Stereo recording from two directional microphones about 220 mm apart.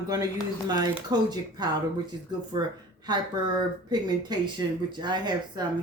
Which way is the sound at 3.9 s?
20° right (ahead or behind).